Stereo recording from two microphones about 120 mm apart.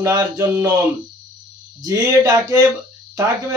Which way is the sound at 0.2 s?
20° right (ahead or behind).